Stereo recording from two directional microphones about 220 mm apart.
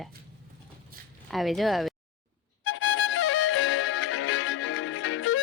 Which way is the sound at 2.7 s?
60° left (ahead or behind).